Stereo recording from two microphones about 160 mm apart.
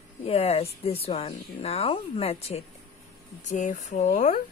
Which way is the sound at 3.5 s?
50° left (ahead or behind).